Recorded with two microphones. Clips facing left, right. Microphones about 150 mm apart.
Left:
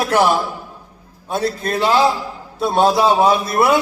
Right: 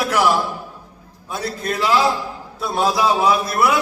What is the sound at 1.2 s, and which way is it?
A man's voice, 25° left (ahead or behind).